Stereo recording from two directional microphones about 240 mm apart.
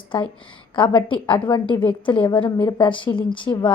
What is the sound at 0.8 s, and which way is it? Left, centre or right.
A woman's voice, left.